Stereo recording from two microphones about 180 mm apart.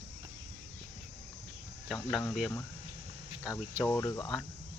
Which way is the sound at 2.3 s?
Centre (ahead or behind).